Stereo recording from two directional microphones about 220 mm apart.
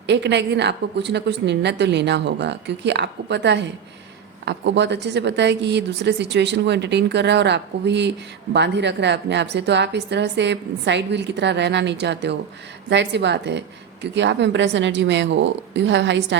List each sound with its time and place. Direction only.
0.1 s a woman's voice: 50° right (ahead or behind)